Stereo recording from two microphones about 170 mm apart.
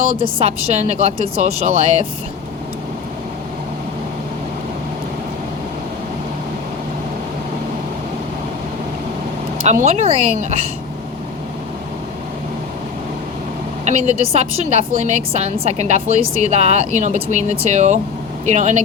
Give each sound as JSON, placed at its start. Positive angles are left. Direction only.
{"t": 0.3, "sound": "a woman's voice", "side_deg": -40}
{"t": 9.6, "sound": "a woman's voice", "side_deg": -40}
{"t": 13.8, "sound": "a woman's voice", "side_deg": -40}